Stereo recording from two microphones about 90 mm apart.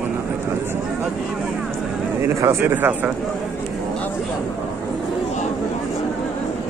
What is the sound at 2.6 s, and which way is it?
Speech, 20° right (ahead or behind).